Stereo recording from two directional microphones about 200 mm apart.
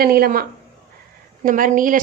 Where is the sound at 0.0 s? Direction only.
45° right (ahead or behind).